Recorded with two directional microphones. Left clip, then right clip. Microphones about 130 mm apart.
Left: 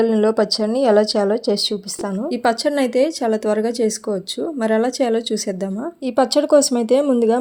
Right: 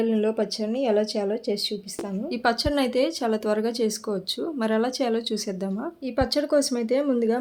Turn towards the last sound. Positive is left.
turn(degrees=50)  # may be behind; listen again after turning